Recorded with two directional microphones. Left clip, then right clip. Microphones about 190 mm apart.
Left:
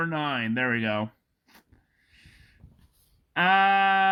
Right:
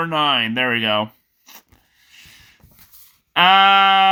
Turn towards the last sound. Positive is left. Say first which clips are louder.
# right 8 dB
turn(degrees=-20)  # may be behind; listen again after turning